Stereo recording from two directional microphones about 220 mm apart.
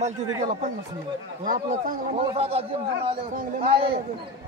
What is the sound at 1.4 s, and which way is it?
A man's voice, 35° right (ahead or behind).